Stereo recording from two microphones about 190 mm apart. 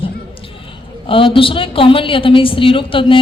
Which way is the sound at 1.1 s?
25° left (ahead or behind).